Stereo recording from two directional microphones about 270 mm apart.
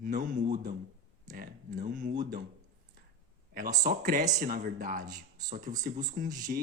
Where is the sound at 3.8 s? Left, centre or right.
Right.